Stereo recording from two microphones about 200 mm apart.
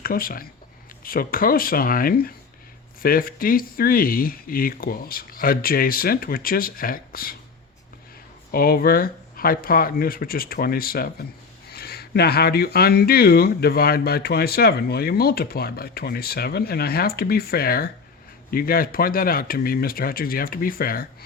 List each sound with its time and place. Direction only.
0.0 s speech: 45° left (ahead or behind)
8.5 s speech: 45° left (ahead or behind)